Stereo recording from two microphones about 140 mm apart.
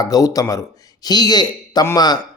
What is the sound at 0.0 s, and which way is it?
Speech, 25° left (ahead or behind).